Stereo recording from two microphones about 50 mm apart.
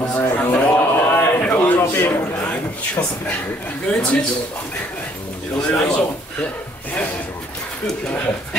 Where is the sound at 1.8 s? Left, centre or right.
Left.